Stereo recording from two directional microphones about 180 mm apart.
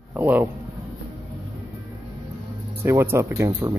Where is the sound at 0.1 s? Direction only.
10° right (ahead or behind).